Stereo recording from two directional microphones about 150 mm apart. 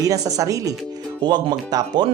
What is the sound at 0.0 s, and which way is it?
Speech, 25° right (ahead or behind).